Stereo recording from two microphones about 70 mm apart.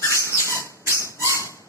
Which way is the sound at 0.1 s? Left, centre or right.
Left.